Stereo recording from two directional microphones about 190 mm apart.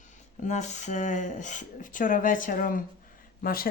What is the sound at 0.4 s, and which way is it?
Speech, 40° left (ahead or behind).